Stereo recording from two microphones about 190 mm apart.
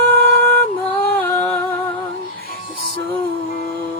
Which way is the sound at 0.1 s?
10° left (ahead or behind).